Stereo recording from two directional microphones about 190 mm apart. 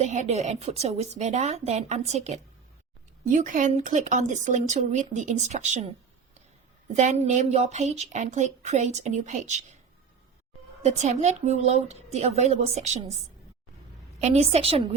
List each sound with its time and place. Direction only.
0.0 s a woman's voice: 40° right (ahead or behind)
6.9 s a woman's voice: 40° right (ahead or behind)
10.8 s a woman's voice: 35° right (ahead or behind)
14.2 s a woman's voice: 35° right (ahead or behind)